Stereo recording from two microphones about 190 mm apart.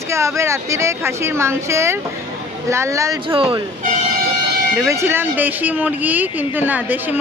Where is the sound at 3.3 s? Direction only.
30° right (ahead or behind).